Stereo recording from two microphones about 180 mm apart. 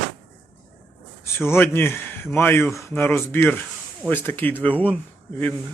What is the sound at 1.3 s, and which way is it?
Speech, 15° left (ahead or behind).